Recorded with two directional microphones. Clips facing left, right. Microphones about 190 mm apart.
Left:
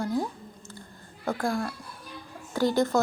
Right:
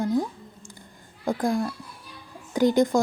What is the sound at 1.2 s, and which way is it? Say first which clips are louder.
Speech: right 4 dB; 15° right (ahead or behind).